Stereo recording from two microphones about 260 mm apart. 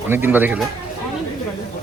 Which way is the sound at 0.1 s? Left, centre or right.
Centre.